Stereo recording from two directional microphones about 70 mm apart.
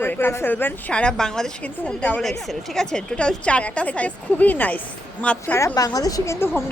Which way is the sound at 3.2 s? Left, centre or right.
Centre.